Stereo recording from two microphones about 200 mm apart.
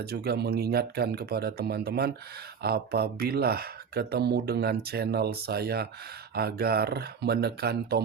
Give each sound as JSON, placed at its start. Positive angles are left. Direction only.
{"t": 0.0, "sound": "speech", "side_deg": -50}